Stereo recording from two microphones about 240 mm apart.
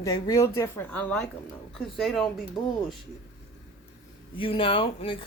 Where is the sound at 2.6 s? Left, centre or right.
Centre.